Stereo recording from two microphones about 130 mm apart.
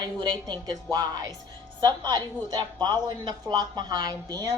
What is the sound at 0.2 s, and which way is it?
A woman's voice, 35° right (ahead or behind).